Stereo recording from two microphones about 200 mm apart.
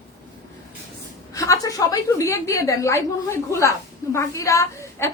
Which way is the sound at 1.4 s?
15° left (ahead or behind).